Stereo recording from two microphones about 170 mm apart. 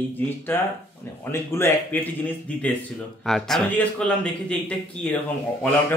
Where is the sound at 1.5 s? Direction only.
15° left (ahead or behind).